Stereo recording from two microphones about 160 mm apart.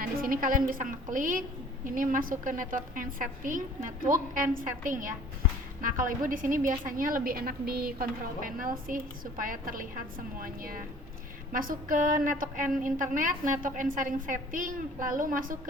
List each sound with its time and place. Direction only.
0.0 s a woman's voice: 60° right (ahead or behind)